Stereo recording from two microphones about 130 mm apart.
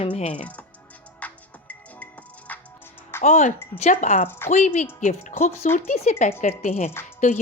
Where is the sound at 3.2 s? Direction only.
70° left (ahead or behind).